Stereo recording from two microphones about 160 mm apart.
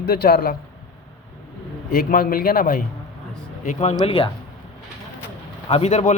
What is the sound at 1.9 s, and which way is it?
Speech, 65° left (ahead or behind).